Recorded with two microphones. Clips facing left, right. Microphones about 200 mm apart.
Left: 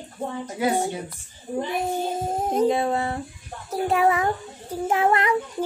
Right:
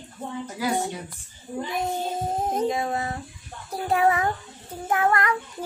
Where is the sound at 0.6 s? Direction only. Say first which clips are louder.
Left 3 dB; 25° left (ahead or behind).